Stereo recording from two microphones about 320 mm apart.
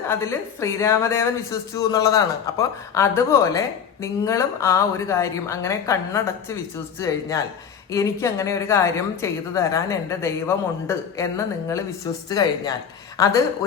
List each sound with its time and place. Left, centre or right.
0.1 s speech: centre